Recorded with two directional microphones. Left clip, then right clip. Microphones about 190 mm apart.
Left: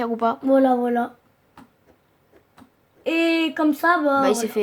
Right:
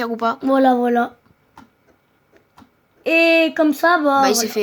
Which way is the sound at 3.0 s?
45° right (ahead or behind).